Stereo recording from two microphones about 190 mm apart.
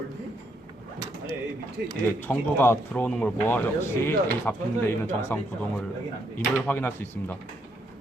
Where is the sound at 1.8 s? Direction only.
65° right (ahead or behind).